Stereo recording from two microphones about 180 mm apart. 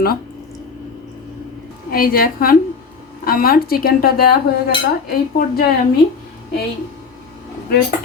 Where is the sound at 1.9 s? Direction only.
55° left (ahead or behind).